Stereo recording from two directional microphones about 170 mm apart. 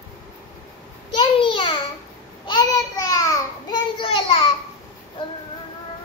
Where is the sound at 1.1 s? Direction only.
30° left (ahead or behind).